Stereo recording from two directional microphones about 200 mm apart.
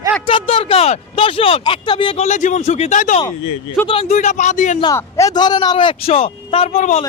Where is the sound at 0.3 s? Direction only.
30° left (ahead or behind).